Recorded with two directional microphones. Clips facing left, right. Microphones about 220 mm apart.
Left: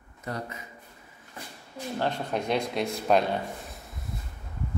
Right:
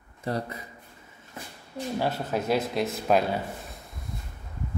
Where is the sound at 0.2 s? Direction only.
35° right (ahead or behind).